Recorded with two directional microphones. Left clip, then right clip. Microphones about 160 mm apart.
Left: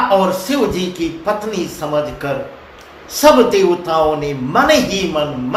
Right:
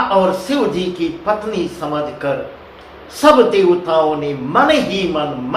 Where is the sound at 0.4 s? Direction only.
30° left (ahead or behind).